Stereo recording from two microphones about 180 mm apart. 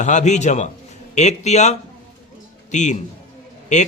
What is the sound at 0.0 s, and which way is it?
A man's voice, 40° left (ahead or behind).